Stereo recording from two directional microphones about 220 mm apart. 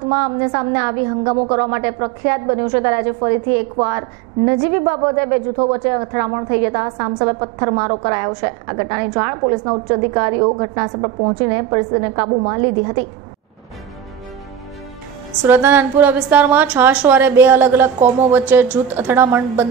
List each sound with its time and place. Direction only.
0.1 s a woman's voice: 25° right (ahead or behind)
15.4 s a woman's voice: 10° right (ahead or behind)